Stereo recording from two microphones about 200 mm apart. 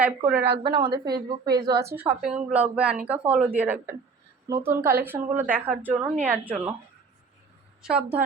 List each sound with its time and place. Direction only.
0.0 s a woman's voice: 5° right (ahead or behind)
0.3 s a woman's voice: 55° right (ahead or behind)
0.6 s a woman's voice: 25° right (ahead or behind); by 6.7 s 10° right (ahead or behind)
7.8 s a woman's voice: 5° right (ahead or behind)